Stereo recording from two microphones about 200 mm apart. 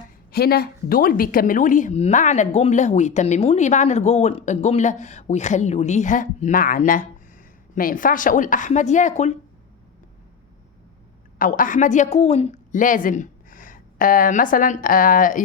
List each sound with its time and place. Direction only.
0.3 s speech: 50° left (ahead or behind)
11.3 s a woman's voice: 40° left (ahead or behind)